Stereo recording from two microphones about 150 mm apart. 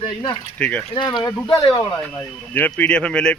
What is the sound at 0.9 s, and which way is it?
Speech, 30° left (ahead or behind).